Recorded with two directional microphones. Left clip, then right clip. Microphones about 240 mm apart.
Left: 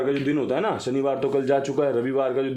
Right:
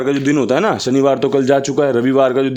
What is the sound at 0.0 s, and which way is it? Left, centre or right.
Speech, right.